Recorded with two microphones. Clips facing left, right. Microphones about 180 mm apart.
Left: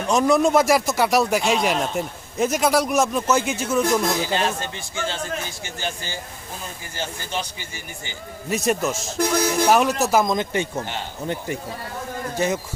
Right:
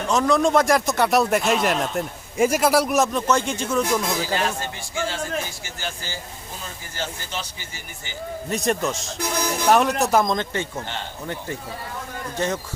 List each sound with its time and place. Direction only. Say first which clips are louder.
0.1 s speech: left 1 dB; 10° left (ahead or behind)
4.2 s speech: left 1 dB; 20° left (ahead or behind)
8.4 s speech: left 2 dB; 5° left (ahead or behind)